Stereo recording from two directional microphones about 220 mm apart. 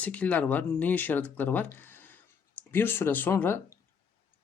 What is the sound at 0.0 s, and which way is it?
Speech, 5° left (ahead or behind).